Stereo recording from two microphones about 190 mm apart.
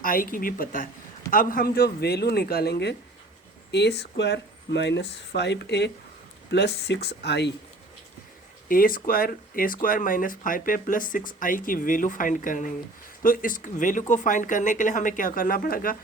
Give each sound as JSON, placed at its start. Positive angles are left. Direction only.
{"t": 0.0, "sound": "speech", "side_deg": 45}
{"t": 8.7, "sound": "speech", "side_deg": 50}